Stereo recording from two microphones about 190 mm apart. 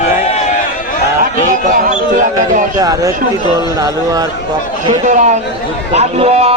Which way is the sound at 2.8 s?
20° right (ahead or behind).